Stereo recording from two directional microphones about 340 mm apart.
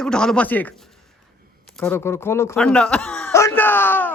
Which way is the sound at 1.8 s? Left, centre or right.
Centre.